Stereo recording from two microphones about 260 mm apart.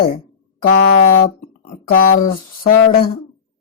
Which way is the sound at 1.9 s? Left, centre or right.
Left.